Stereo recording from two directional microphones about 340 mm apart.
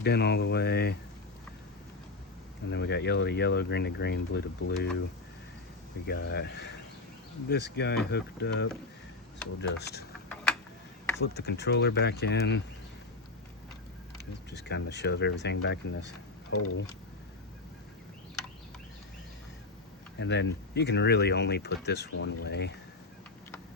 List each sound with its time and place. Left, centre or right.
0.0 s speech: left
2.6 s speech: left
6.1 s speech: left
10.2 s tick-tock: centre
11.2 s speech: left
14.5 s speech: left
20.1 s speech: left